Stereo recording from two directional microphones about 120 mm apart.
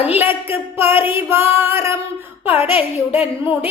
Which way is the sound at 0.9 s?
15° right (ahead or behind).